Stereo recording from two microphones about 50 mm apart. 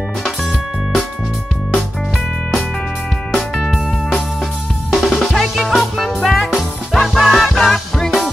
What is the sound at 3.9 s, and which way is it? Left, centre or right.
Music, centre.